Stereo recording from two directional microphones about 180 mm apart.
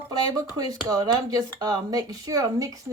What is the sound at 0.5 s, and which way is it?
Speech, 20° right (ahead or behind).